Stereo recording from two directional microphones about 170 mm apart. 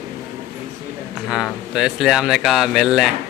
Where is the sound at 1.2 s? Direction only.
5° right (ahead or behind).